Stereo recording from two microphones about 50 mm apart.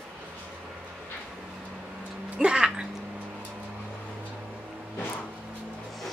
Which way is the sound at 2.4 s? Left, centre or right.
Centre.